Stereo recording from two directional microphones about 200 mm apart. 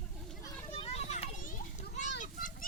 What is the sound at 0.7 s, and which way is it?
Children playing, 30° left (ahead or behind).